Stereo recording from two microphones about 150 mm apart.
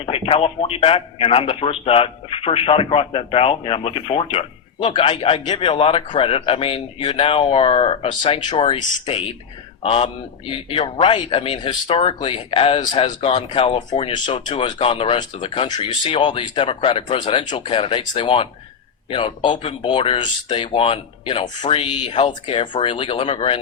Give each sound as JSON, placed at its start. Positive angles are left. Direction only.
{"t": 0.0, "sound": "a man's voice", "side_deg": 40}